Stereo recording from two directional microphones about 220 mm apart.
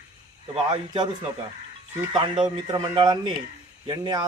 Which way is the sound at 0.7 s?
20° right (ahead or behind).